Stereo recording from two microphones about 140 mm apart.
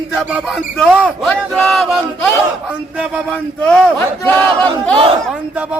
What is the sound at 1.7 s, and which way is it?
Battle cry, centre (ahead or behind).